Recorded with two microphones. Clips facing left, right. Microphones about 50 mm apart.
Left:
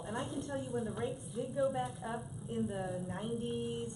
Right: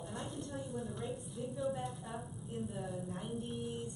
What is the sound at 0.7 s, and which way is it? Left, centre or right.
A woman's voice, centre.